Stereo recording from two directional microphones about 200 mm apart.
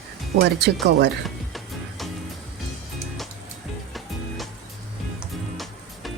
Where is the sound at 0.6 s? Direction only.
60° right (ahead or behind).